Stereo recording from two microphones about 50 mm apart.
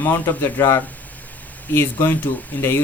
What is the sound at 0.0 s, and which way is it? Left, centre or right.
Speech, left.